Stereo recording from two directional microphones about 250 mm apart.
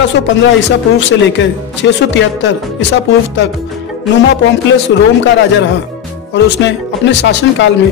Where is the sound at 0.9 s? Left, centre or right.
Left.